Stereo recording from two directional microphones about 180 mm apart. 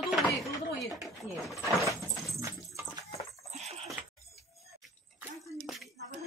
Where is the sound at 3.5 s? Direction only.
35° right (ahead or behind).